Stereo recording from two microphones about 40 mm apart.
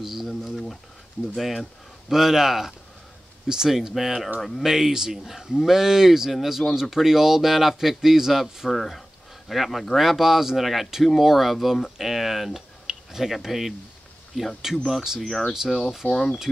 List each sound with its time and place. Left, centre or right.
0.0 s a sound: centre
0.4 s a sound: centre
1.3 s speech: centre
4.6 s speech: centre
15.2 s speech: centre
16.0 s speech: left